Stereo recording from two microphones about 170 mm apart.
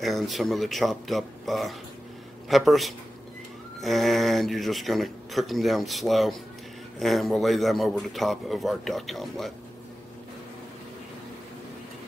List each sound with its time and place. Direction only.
0.0 s speech: centre (ahead or behind)